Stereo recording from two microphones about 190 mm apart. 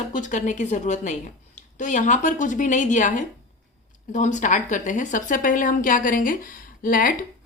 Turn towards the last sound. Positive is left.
turn(degrees=45)  # may be behind; listen again after turning